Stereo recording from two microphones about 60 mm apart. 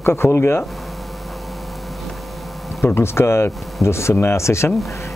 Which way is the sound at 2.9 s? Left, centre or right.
Left.